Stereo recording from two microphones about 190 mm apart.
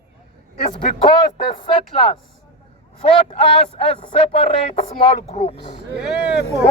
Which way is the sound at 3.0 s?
30° left (ahead or behind).